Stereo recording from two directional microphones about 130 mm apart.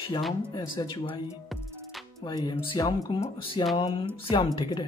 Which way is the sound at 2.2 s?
35° left (ahead or behind).